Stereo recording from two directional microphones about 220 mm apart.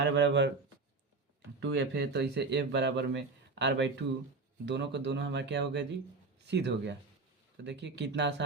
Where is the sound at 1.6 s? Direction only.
55° right (ahead or behind).